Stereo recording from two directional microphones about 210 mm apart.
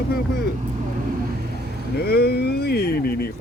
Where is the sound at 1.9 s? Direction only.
50° left (ahead or behind).